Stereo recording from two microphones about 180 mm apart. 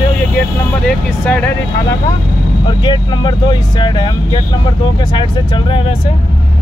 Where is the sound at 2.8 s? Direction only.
25° left (ahead or behind).